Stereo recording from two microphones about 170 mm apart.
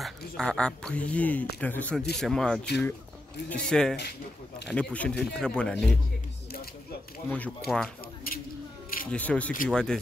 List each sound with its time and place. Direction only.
0.0 s speech: 5° left (ahead or behind)
7.2 s speech: 10° left (ahead or behind)
8.3 s a sound: 60° left (ahead or behind)
9.1 s speech: 10° left (ahead or behind)